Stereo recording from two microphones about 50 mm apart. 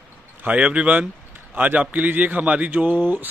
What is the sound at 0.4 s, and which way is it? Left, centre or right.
A man's voice, right.